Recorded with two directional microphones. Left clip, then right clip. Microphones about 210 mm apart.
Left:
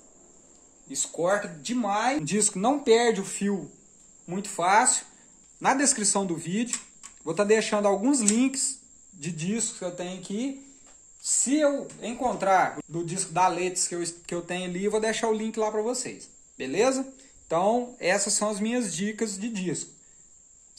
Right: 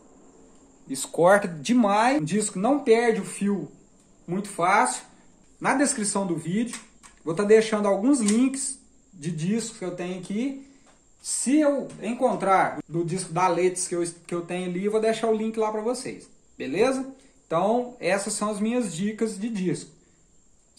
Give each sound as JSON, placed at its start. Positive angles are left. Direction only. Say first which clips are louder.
{"t": 0.8, "sound": "speech", "louder": "right 7 dB", "side_deg": -30}
{"t": 2.2, "sound": "speech", "louder": "right 1 dB", "side_deg": 45}